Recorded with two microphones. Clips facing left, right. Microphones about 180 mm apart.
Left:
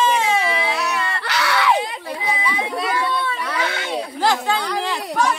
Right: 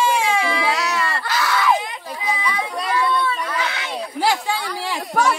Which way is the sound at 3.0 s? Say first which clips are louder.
Right 2 dB; 45° left (ahead or behind).